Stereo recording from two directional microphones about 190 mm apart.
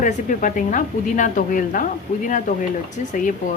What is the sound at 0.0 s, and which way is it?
A woman's voice, 45° left (ahead or behind).